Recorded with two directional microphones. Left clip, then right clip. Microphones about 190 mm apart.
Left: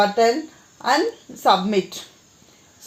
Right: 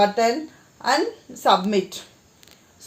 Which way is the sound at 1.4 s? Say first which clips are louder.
Left 1 dB; 45° left (ahead or behind).